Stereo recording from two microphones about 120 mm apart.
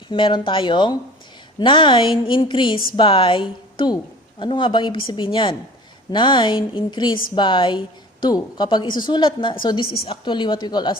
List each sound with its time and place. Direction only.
0.1 s a woman's voice: 45° left (ahead or behind)